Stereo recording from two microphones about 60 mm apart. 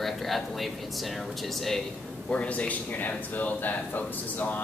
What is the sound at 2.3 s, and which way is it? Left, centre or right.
Speech, left.